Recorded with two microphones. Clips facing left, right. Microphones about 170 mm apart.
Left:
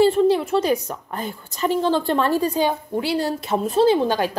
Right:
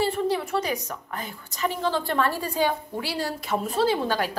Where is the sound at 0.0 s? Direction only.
25° left (ahead or behind).